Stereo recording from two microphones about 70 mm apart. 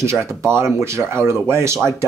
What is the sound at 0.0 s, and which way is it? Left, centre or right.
Speech, right.